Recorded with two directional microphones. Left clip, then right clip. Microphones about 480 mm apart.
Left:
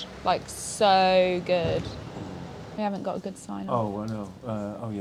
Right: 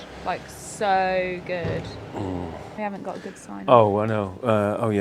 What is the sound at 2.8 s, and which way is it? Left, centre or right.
Speech, centre.